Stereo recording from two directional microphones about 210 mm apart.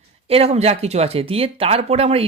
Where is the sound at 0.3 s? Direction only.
30° right (ahead or behind).